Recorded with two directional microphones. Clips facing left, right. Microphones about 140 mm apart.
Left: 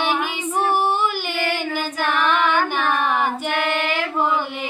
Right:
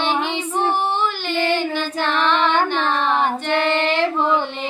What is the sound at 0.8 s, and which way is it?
Child singing, 10° left (ahead or behind).